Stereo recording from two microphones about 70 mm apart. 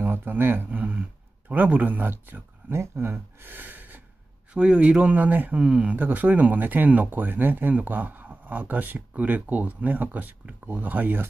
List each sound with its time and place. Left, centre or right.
0.0 s speech: right